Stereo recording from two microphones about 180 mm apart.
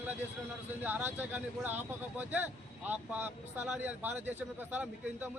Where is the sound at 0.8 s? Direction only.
10° right (ahead or behind).